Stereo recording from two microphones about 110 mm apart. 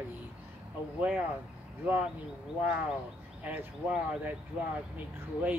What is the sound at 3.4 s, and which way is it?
Speech, 10° right (ahead or behind).